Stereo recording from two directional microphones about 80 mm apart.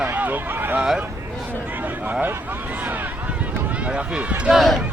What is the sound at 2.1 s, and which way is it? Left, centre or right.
Speech, right.